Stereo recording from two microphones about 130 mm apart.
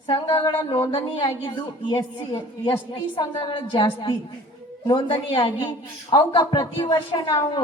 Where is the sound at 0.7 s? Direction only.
45° left (ahead or behind).